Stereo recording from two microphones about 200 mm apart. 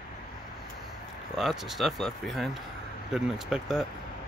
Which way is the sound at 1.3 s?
Centre (ahead or behind).